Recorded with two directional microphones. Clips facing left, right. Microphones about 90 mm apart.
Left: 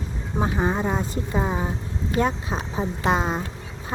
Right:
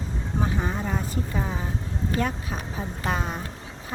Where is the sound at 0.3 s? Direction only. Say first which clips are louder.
Left 5 dB; 25° left (ahead or behind).